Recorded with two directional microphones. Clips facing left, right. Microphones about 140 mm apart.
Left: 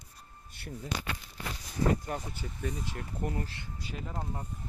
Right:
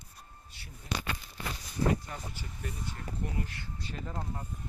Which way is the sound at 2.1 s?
45° left (ahead or behind).